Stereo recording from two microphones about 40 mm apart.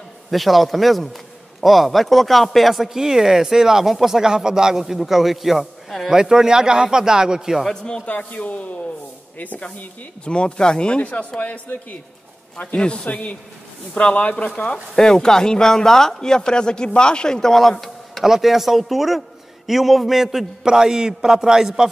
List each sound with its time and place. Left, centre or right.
0.3 s a man's voice: centre
6.0 s a man's voice: centre
7.6 s speech: centre
8.0 s speech: left
10.2 s speech: left
11.0 s speech: left
15.0 s speech: centre
18.2 s speech: centre
20.6 s a man's voice: centre